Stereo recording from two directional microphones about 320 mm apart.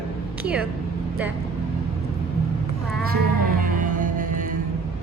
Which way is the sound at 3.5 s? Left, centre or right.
Right.